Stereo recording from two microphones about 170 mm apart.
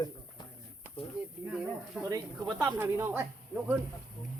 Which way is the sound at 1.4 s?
5° right (ahead or behind).